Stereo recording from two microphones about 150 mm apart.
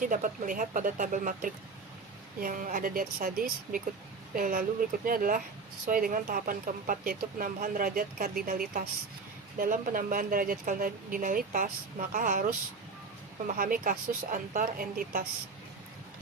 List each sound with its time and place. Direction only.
0.0 s speech: 65° right (ahead or behind)
13.6 s speech: 70° right (ahead or behind)